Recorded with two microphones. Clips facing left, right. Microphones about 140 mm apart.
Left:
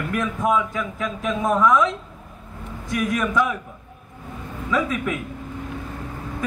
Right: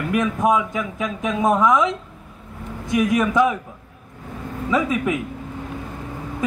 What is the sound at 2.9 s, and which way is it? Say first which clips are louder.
Speech: right 4 dB; 20° right (ahead or behind).